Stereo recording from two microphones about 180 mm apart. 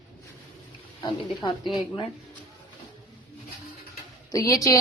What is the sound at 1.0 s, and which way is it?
Speech, 25° left (ahead or behind).